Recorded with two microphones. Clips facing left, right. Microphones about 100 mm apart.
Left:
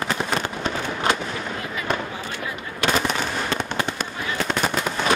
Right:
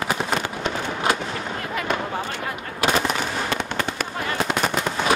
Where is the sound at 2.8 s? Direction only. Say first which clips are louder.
Right 1 dB; 5° right (ahead or behind).